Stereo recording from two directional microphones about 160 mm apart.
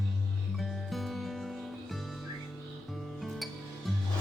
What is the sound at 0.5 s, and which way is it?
Music, centre (ahead or behind).